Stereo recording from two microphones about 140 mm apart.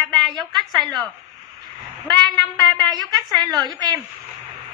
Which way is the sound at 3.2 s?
30° right (ahead or behind).